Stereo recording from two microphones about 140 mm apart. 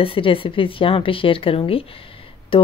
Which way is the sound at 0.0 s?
40° left (ahead or behind).